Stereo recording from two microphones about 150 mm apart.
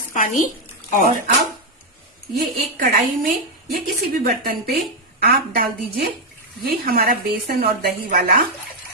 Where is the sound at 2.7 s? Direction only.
70° right (ahead or behind).